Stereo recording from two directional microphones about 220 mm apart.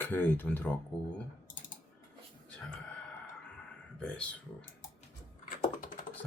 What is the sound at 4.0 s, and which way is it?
Speech, 5° left (ahead or behind).